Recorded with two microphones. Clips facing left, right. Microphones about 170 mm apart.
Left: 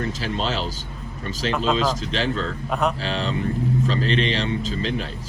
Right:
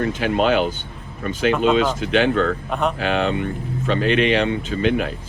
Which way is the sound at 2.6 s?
Centre (ahead or behind).